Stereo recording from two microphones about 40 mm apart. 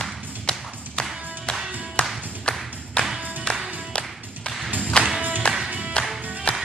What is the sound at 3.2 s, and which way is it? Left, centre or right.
Music, right.